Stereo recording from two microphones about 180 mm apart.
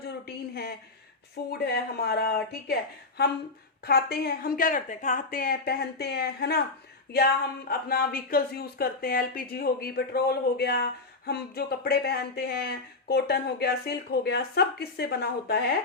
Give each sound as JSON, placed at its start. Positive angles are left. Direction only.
{"t": 0.0, "sound": "a sound", "side_deg": 60}
{"t": 1.5, "sound": "speech", "side_deg": 60}
{"t": 3.8, "sound": "speech", "side_deg": 60}
{"t": 7.7, "sound": "speech", "side_deg": 55}